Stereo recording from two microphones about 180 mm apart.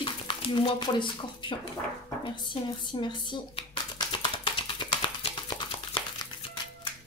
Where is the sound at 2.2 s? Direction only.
25° left (ahead or behind).